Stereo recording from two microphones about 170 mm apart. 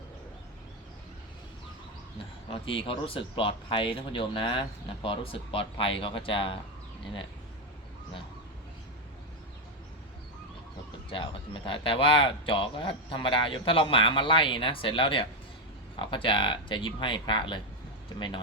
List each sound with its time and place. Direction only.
2.5 s speech: 30° left (ahead or behind)
11.1 s speech: 30° left (ahead or behind)